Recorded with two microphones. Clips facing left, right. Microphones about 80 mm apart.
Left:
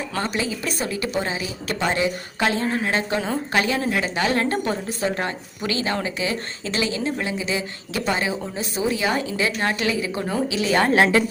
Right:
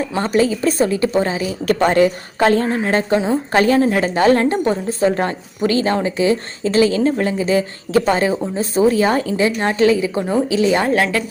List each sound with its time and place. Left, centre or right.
0.2 s a woman's voice: right
1.6 s a woman's voice: right
4.4 s a woman's voice: right
10.9 s a woman's voice: left